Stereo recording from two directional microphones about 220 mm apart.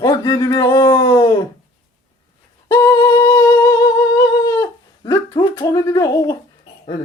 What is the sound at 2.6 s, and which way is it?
Humming, 15° left (ahead or behind).